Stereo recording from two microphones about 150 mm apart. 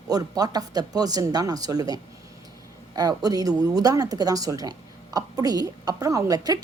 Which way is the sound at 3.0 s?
25° right (ahead or behind).